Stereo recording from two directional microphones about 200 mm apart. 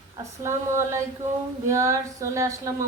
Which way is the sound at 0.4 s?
15° right (ahead or behind).